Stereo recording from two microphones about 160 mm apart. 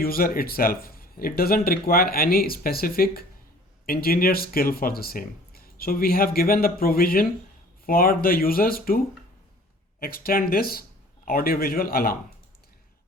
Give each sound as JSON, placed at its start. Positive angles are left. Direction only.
{"t": 0.0, "sound": "speech", "side_deg": 65}
{"t": 10.0, "sound": "speech", "side_deg": 65}